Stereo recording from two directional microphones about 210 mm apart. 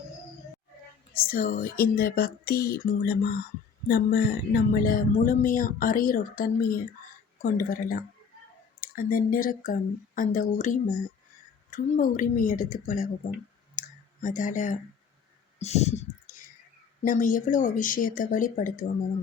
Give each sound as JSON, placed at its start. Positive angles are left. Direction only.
{"t": 1.1, "sound": "speech", "side_deg": 45}
{"t": 13.7, "sound": "clicking", "side_deg": 35}
{"t": 15.5, "sound": "a sound", "side_deg": 30}
{"t": 17.0, "sound": "speech", "side_deg": 40}